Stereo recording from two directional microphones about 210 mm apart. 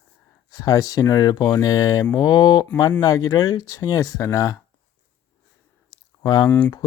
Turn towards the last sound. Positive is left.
turn(degrees=10)  # may be behind; listen again after turning